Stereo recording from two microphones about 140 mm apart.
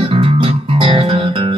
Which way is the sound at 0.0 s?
40° right (ahead or behind).